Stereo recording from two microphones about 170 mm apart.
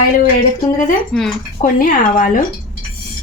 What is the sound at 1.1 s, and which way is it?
Speech, centre (ahead or behind).